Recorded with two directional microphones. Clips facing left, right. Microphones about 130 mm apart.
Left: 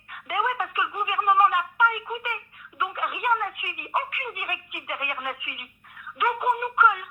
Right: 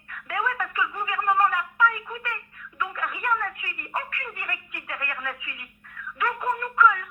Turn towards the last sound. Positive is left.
turn(degrees=15)  # may be behind; listen again after turning